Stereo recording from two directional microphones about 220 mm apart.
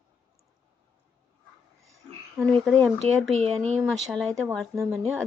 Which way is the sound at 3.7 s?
5° left (ahead or behind).